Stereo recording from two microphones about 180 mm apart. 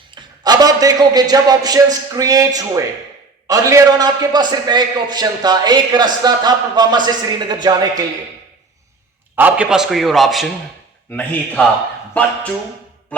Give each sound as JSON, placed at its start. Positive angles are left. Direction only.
{"t": 0.1, "sound": "a man's voice", "side_deg": -20}
{"t": 9.3, "sound": "a man's voice", "side_deg": -10}